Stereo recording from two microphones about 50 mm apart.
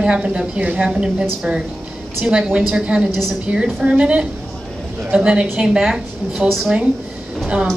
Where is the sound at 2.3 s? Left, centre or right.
Centre.